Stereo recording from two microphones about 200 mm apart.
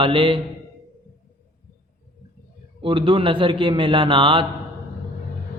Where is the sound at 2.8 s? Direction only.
25° right (ahead or behind).